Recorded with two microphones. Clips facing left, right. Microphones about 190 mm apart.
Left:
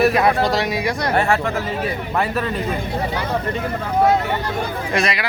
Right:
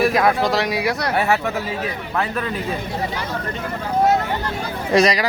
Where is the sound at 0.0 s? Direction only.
5° left (ahead or behind).